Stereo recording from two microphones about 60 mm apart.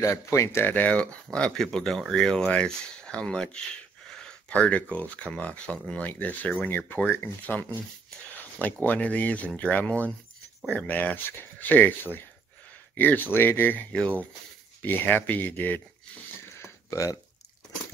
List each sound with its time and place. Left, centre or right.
0.0 s speech: left
0.8 s speech: centre
2.4 s speech: centre
4.5 s speech: left
14.8 s speech: left
16.6 s a sound: left